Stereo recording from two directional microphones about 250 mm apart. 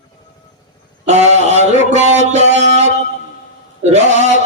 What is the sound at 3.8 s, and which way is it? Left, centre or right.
Mantra, right.